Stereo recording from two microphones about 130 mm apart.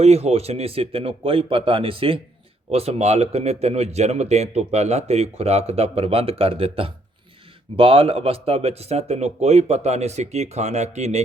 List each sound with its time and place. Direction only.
0.0 s a man's voice: 55° right (ahead or behind)